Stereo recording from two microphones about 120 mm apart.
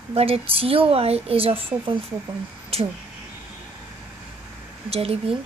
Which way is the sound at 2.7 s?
60° right (ahead or behind).